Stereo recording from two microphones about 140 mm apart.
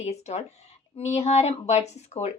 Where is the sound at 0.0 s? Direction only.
55° left (ahead or behind).